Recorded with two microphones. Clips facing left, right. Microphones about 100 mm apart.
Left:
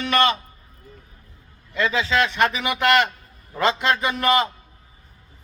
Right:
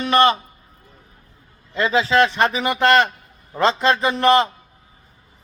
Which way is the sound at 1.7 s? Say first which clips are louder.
Right 4 dB; 30° right (ahead or behind).